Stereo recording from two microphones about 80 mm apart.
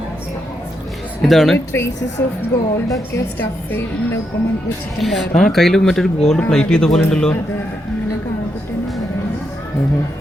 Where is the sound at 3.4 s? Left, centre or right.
Left.